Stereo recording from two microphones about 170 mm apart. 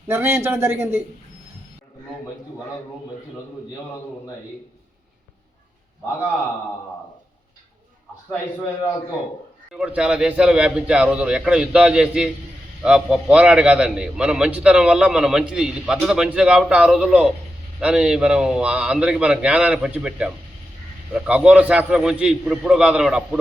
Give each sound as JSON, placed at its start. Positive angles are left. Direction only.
{"t": 0.1, "sound": "speech", "side_deg": -10}
{"t": 9.7, "sound": "a man's voice", "side_deg": -5}